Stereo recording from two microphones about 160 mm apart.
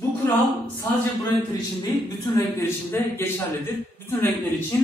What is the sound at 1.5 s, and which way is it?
Speech, 25° left (ahead or behind).